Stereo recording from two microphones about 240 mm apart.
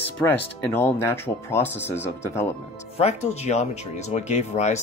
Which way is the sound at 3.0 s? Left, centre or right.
Left.